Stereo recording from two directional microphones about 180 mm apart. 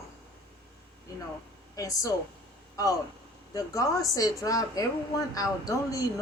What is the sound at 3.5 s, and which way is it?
A woman's voice, 20° left (ahead or behind).